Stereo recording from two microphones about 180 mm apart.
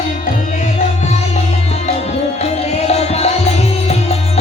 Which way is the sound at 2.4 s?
35° left (ahead or behind).